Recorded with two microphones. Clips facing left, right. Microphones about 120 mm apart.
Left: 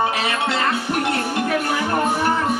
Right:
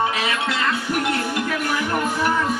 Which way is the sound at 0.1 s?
30° left (ahead or behind).